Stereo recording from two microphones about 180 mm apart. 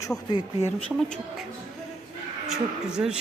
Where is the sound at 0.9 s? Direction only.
5° right (ahead or behind).